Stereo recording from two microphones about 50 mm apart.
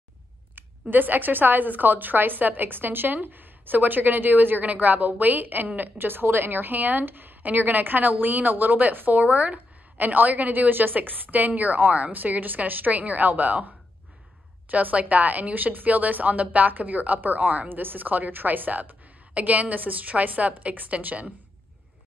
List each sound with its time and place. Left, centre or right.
0.6 s a woman's voice: right
14.7 s a woman's voice: right